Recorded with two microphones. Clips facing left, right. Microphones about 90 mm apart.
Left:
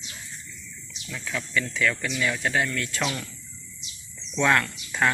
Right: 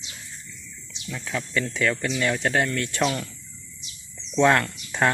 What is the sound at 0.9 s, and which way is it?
Speech, 25° right (ahead or behind).